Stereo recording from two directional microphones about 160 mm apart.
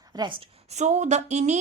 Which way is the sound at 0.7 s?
45° right (ahead or behind).